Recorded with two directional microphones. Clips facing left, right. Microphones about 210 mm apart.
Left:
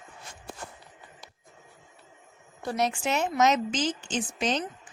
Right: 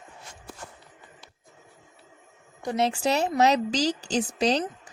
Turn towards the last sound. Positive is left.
turn(degrees=-35)  # may be behind; listen again after turning